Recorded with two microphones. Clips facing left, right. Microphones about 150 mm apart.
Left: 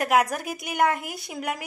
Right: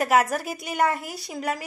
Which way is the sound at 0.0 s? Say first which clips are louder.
Right 1 dB; centre (ahead or behind).